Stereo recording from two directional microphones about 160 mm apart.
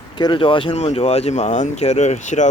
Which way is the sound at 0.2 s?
30° left (ahead or behind).